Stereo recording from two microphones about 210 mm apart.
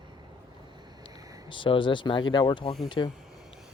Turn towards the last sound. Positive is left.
turn(degrees=20)  # may be behind; listen again after turning